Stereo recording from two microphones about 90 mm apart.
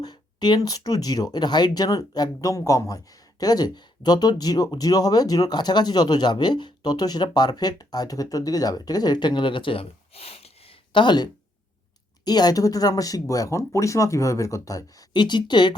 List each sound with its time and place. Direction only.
0.0 s speech: 50° left (ahead or behind); by 10.4 s 90° left
10.9 s speech: 60° left (ahead or behind)
12.2 s speech: 50° left (ahead or behind)
15.1 s speech: 55° left (ahead or behind)